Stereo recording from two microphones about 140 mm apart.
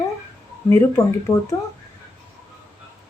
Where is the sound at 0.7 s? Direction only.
20° left (ahead or behind).